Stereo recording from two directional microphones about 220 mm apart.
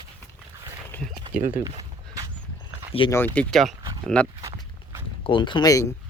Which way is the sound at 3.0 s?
20° left (ahead or behind).